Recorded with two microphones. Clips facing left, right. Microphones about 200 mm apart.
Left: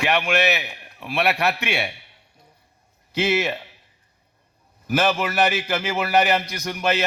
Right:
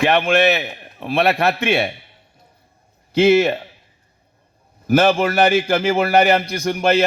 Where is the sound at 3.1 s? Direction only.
30° right (ahead or behind).